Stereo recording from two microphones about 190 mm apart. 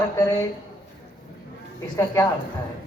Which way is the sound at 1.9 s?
15° left (ahead or behind).